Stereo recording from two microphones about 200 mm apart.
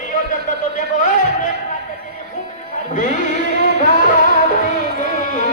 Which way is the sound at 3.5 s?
40° left (ahead or behind).